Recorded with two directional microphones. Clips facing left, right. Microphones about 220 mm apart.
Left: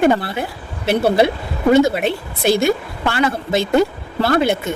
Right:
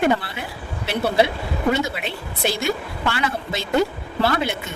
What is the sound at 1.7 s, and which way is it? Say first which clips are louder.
A woman's voice: left 11 dB; 45° left (ahead or behind).